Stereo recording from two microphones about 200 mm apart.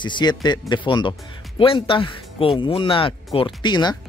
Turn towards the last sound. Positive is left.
turn(degrees=20)  # may be behind; listen again after turning